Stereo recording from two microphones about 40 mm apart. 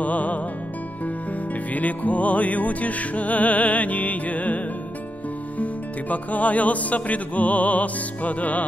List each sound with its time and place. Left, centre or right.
0.0 s music: left
5.6 s music: left